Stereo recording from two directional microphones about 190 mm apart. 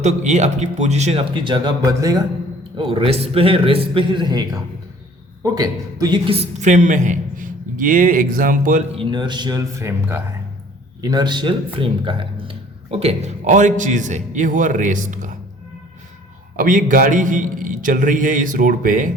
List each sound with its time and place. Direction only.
0.0 s a man's voice: 40° right (ahead or behind)
9.0 s a man's voice: 25° right (ahead or behind); by 15.4 s 45° right (ahead or behind)
16.6 s a man's voice: 45° right (ahead or behind)